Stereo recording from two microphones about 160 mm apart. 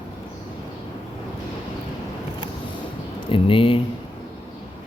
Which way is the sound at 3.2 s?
35° left (ahead or behind).